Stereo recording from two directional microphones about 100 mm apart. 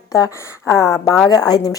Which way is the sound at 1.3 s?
40° left (ahead or behind).